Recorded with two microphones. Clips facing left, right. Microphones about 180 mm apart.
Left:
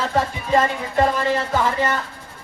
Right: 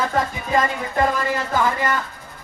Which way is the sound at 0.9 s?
25° left (ahead or behind).